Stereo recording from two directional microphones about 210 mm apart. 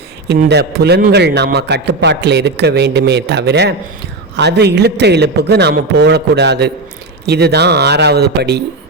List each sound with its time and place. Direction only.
0.3 s a man's voice: 55° right (ahead or behind)